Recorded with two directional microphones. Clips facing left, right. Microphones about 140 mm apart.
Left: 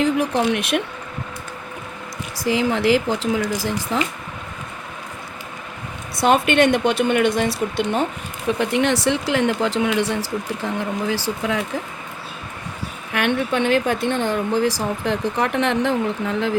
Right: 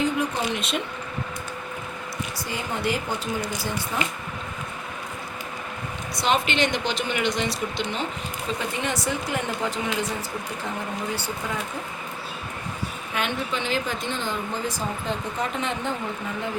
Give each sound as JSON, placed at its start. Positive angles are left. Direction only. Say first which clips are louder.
{"t": 0.0, "sound": "speech", "louder": "left 6 dB", "side_deg": 75}
{"t": 2.4, "sound": "speech", "louder": "left 11 dB", "side_deg": 90}
{"t": 6.2, "sound": "a woman's voice", "louder": "left 8 dB", "side_deg": 55}
{"t": 8.4, "sound": "speech", "louder": "left 10 dB", "side_deg": 75}
{"t": 13.1, "sound": "speech", "louder": "left 8 dB", "side_deg": 65}